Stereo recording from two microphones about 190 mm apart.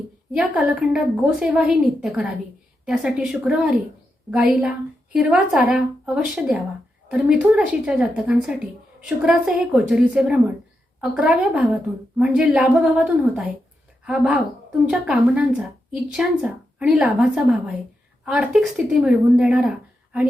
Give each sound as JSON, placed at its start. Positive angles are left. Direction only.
{"t": 0.3, "sound": "a woman's voice", "side_deg": -5}